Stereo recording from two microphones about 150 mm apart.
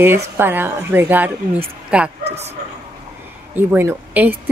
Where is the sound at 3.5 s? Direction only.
15° right (ahead or behind).